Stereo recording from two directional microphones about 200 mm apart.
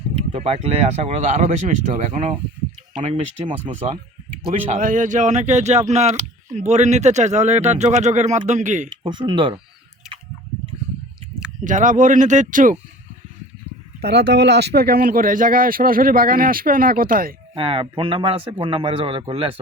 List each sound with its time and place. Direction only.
0.3 s speech: 30° right (ahead or behind)
4.4 s speech: 45° right (ahead or behind)
9.0 s speech: 25° right (ahead or behind)
10.0 s a sound: centre (ahead or behind)
11.6 s speech: 40° right (ahead or behind)
14.0 s speech: 55° right (ahead or behind)
17.5 s speech: 25° right (ahead or behind)